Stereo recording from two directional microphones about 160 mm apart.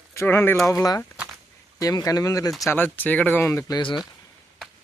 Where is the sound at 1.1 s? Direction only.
5° right (ahead or behind).